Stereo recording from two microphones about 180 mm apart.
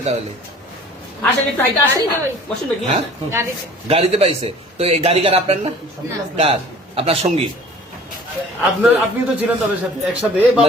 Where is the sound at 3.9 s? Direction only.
35° right (ahead or behind).